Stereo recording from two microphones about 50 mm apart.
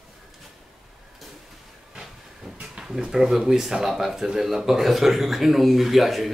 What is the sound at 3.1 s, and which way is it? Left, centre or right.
Speech, centre.